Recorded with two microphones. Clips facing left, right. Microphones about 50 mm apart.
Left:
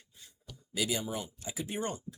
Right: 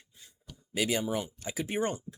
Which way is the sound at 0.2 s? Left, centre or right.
Right.